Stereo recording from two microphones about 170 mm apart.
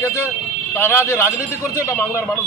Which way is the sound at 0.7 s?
15° left (ahead or behind).